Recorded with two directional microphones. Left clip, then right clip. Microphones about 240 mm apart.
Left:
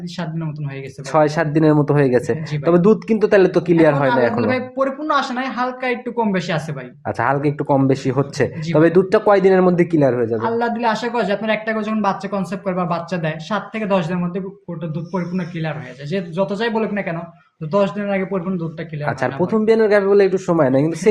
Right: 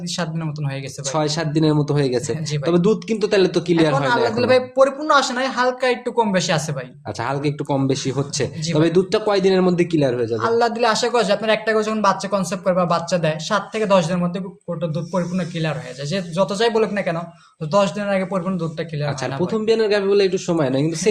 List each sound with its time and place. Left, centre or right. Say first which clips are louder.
1.1 s a man's voice: left 6 dB; centre
4.4 s speech: right 4 dB; right
7.1 s a man's voice: left 5 dB; centre
10.4 s speech: right 2 dB; right
19.2 s a man's voice: left 4 dB; centre